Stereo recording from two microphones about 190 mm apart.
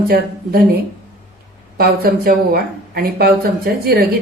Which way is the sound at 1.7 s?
50° right (ahead or behind).